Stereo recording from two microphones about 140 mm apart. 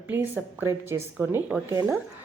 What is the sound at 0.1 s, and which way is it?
A woman's voice, 20° right (ahead or behind).